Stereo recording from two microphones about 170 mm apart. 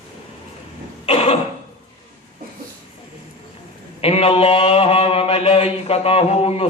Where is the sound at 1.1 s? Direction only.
35° left (ahead or behind).